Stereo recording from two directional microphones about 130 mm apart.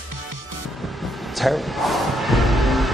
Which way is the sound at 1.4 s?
Centre (ahead or behind).